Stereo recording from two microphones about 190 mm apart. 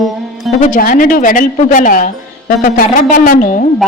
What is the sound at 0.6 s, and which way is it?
A woman's voice, 45° left (ahead or behind).